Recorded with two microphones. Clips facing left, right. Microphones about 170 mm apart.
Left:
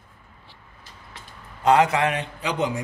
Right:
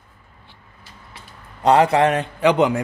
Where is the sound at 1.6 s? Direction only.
35° right (ahead or behind).